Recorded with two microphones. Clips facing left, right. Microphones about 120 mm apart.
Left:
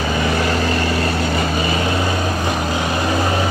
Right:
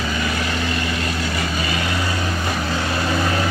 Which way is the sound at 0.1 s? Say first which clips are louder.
Left 5 dB; 35° left (ahead or behind).